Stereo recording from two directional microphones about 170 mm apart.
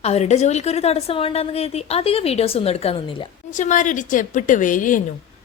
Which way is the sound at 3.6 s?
50° left (ahead or behind).